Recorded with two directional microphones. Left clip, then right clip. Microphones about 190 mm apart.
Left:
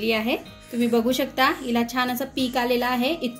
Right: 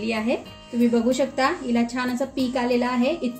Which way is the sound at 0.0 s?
50° left (ahead or behind).